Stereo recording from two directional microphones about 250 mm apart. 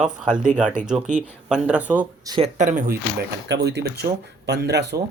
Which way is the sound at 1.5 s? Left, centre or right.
Centre.